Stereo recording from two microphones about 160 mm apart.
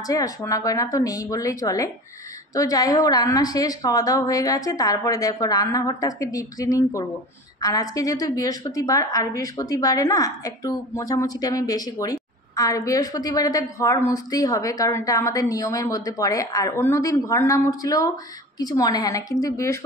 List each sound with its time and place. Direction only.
0.0 s a woman's voice: 20° left (ahead or behind)